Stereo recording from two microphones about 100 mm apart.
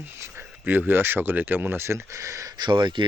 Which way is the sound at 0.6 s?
20° right (ahead or behind).